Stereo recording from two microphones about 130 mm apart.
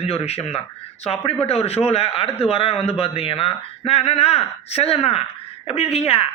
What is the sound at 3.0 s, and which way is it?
Speech, 45° left (ahead or behind).